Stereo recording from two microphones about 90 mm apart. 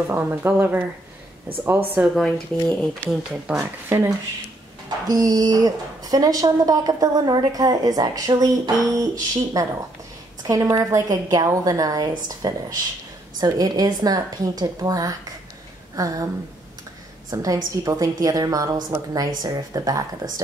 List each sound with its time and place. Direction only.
0.1 s speech: 25° right (ahead or behind)
2.1 s speech: 5° left (ahead or behind)
3.1 s speech: 5° right (ahead or behind)
5.0 s a woman's voice: 45° right (ahead or behind)
17.3 s a woman's voice: 40° right (ahead or behind)